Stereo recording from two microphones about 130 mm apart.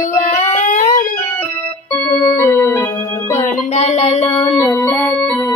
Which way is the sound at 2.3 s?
20° left (ahead or behind).